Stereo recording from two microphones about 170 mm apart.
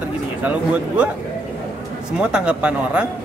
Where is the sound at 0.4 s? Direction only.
10° right (ahead or behind).